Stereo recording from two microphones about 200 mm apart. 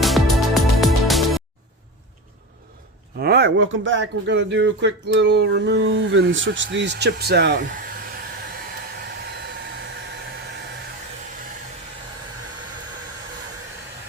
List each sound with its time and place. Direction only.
0.0 s music: centre (ahead or behind)
3.2 s speech: 55° right (ahead or behind)